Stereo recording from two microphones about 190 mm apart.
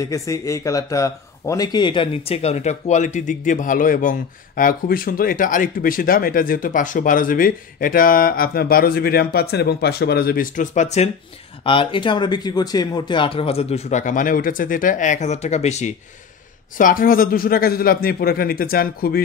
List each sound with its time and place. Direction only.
0.0 s speech: 15° left (ahead or behind); by 11.1 s 35° left (ahead or behind)
11.6 s speech: 25° left (ahead or behind)
16.7 s speech: 45° left (ahead or behind)